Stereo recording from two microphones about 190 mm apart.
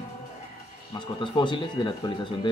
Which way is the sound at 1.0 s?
25° left (ahead or behind).